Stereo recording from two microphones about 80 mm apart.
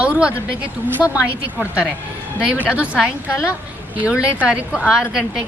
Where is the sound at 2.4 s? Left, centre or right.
Centre.